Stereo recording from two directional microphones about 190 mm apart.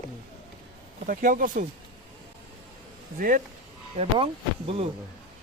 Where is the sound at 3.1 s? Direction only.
45° right (ahead or behind).